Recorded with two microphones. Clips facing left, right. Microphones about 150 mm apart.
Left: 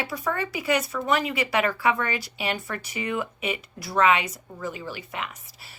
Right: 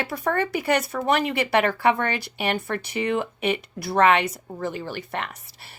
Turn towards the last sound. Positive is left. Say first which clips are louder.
# right 3 dB
turn(degrees=-60)  # may be behind; listen again after turning